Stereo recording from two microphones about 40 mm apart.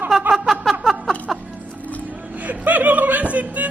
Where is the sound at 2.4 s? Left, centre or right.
Right.